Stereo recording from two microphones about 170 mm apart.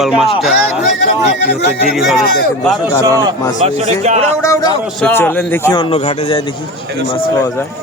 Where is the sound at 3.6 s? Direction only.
40° right (ahead or behind).